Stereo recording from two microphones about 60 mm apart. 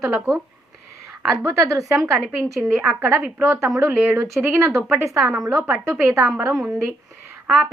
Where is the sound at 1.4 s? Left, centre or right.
Right.